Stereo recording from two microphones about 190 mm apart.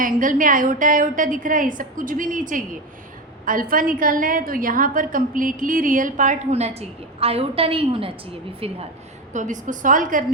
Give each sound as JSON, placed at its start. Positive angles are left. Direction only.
{"t": 0.0, "sound": "a woman's voice", "side_deg": -45}
{"t": 9.3, "sound": "a woman's voice", "side_deg": -40}